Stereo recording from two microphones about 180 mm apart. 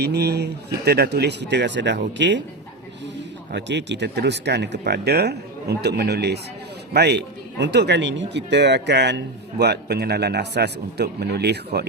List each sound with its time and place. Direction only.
0.0 s speech: 65° right (ahead or behind)